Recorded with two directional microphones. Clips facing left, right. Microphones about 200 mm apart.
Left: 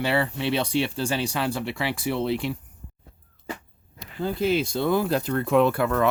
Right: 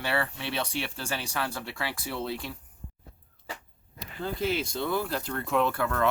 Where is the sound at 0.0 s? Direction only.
20° left (ahead or behind).